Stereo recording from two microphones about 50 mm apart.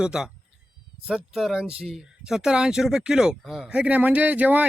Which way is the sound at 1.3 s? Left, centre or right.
Centre.